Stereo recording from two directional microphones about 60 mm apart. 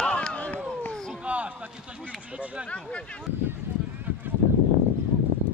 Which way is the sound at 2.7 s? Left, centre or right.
Left.